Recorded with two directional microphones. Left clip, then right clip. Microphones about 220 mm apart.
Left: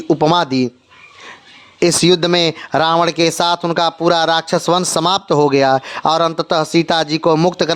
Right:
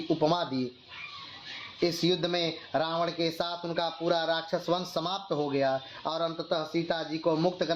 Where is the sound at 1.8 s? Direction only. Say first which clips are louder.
Left 15 dB; 55° left (ahead or behind).